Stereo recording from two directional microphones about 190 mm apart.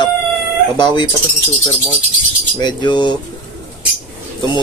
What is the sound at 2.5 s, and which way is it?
Speech, 20° left (ahead or behind).